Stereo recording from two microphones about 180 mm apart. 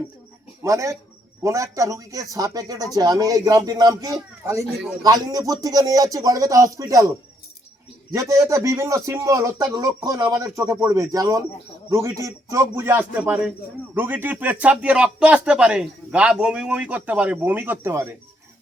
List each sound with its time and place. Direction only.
0.6 s a man's voice: 15° right (ahead or behind)
8.1 s a man's voice: 20° right (ahead or behind)